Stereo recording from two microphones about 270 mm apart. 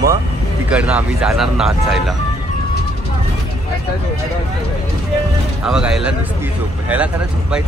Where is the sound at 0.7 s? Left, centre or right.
Centre.